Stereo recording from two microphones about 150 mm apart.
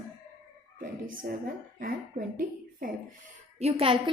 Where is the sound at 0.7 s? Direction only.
65° right (ahead or behind).